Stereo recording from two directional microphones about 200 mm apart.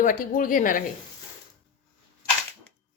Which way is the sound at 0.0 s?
40° left (ahead or behind).